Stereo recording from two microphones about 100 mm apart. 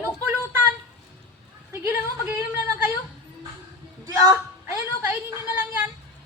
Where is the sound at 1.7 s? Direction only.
20° right (ahead or behind).